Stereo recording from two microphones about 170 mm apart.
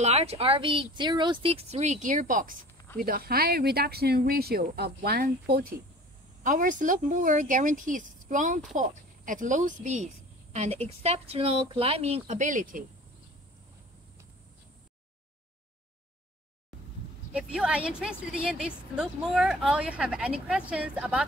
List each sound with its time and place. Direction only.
0.0 s speech: 40° right (ahead or behind); by 5.7 s 60° right (ahead or behind)
6.4 s speech: 50° right (ahead or behind)
17.3 s a woman's voice: 5° right (ahead or behind)